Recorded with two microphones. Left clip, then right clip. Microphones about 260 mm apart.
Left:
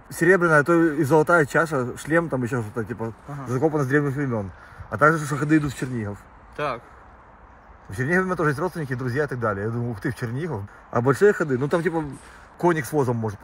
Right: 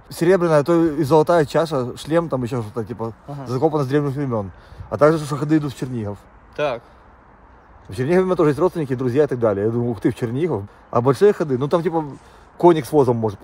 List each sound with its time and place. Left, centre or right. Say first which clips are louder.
0.1 s speech: right 2 dB; centre
6.5 s speech: right 5 dB; right
8.1 s speech: right 5 dB; right